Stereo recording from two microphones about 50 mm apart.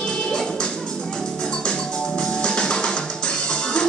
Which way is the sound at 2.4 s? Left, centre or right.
Centre.